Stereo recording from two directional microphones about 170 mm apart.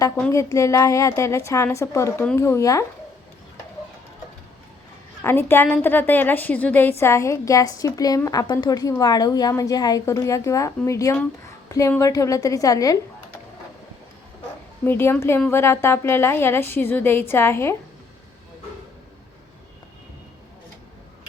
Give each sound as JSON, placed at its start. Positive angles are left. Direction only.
{"t": 0.0, "sound": "a woman's voice", "side_deg": 20}
{"t": 5.2, "sound": "a woman's voice", "side_deg": 15}
{"t": 14.8, "sound": "a woman's voice", "side_deg": 15}